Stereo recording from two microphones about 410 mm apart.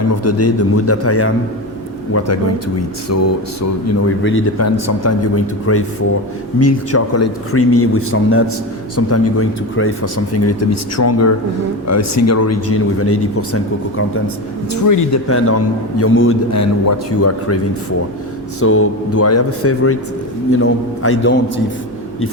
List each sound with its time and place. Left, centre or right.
0.2 s speech: left
14.7 s speech: left
15.3 s speech: left
18.6 s speech: left